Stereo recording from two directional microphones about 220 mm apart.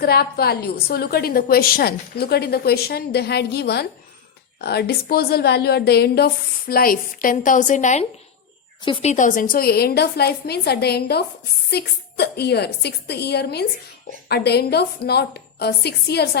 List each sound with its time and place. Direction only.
0.0 s a woman's voice: 45° left (ahead or behind)